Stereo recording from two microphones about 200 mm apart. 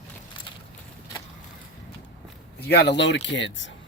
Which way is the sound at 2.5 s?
55° left (ahead or behind).